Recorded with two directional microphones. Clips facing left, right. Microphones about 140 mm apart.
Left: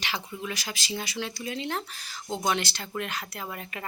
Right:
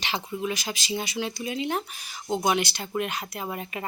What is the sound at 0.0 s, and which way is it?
Speech, 20° right (ahead or behind).